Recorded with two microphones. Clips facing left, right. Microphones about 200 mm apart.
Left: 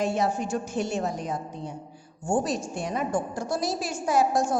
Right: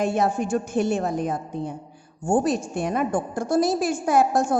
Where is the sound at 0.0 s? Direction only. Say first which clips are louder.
Right 3 dB; 55° right (ahead or behind).